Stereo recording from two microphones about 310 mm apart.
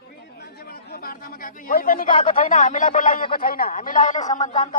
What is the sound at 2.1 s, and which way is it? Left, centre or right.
Speech, left.